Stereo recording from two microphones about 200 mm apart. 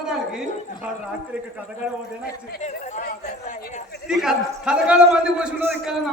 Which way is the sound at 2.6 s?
35° left (ahead or behind).